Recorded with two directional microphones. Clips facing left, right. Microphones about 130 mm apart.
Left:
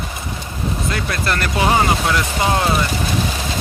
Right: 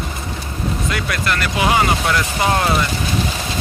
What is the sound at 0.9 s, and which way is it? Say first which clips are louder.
Speech: left 1 dB; 35° left (ahead or behind).